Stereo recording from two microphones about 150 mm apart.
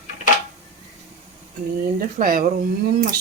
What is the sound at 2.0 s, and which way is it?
Speech, 70° right (ahead or behind).